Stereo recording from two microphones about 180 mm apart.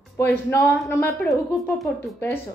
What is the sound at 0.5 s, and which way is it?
A woman's voice, 10° left (ahead or behind).